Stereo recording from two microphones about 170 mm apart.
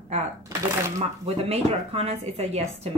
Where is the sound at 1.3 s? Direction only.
35° right (ahead or behind).